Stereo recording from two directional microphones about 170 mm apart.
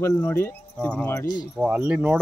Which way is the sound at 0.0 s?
15° left (ahead or behind).